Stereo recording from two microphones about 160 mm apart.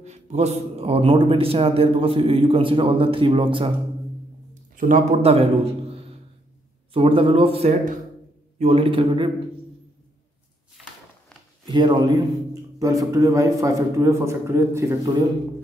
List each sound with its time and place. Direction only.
0.0 s a man's voice: 45° right (ahead or behind)
4.7 s speech: 55° right (ahead or behind)
5.2 s a man's voice: 40° right (ahead or behind)
11.7 s a man's voice: 30° right (ahead or behind)